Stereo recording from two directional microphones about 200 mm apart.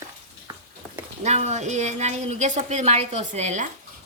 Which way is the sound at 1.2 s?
35° right (ahead or behind).